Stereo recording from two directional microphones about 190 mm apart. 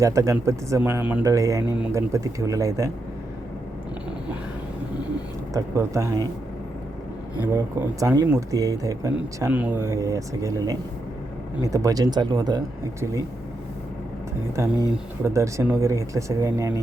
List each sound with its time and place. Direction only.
0.0 s speech: 15° right (ahead or behind)
5.5 s speech: 15° right (ahead or behind)
7.4 s speech: 15° right (ahead or behind)
15.2 s speech: 15° right (ahead or behind)